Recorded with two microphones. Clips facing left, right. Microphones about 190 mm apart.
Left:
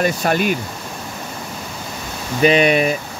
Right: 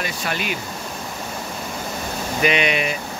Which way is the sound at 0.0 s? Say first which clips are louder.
Left 9 dB; 45° left (ahead or behind).